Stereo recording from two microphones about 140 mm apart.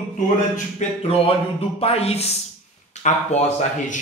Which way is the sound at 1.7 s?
45° left (ahead or behind).